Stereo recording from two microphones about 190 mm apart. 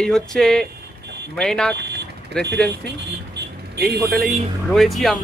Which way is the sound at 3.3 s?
60° right (ahead or behind).